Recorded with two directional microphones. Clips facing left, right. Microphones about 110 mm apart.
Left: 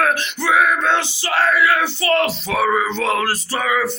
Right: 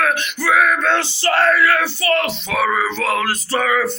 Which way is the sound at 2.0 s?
30° left (ahead or behind).